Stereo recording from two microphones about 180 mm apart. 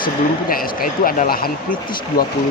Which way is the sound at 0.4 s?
55° left (ahead or behind).